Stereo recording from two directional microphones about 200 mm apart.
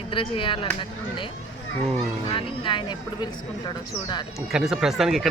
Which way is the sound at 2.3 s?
25° left (ahead or behind).